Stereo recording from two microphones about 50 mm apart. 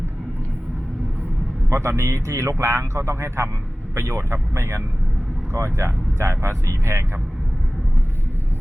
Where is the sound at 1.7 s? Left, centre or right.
Right.